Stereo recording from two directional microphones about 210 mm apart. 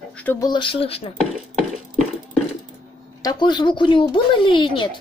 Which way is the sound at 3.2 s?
20° left (ahead or behind).